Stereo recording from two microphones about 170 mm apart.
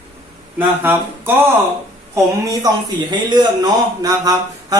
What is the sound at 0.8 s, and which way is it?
A man's voice, 15° right (ahead or behind).